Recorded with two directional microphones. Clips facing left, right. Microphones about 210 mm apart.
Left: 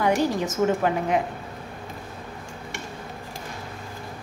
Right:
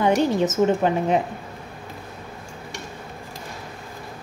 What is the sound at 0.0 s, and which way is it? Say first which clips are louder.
A woman's voice: right 3 dB; 25° right (ahead or behind).